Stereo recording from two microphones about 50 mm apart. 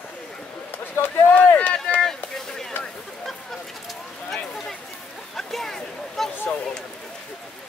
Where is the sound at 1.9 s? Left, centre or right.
Centre.